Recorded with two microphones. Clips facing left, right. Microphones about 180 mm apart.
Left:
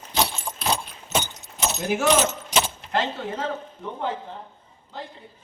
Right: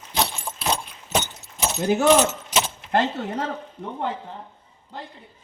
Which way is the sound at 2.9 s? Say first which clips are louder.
Right 4 dB; 55° right (ahead or behind).